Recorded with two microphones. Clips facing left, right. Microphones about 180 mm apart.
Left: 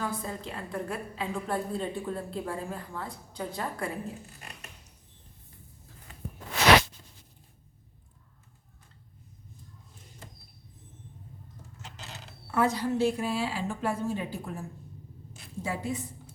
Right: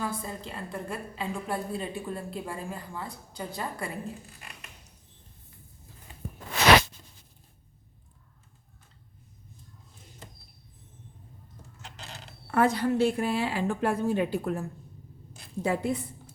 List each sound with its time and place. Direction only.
0.0 s a woman's voice: centre (ahead or behind)
12.5 s a woman's voice: 60° right (ahead or behind)